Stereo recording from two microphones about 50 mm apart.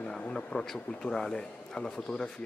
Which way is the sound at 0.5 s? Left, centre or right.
Centre.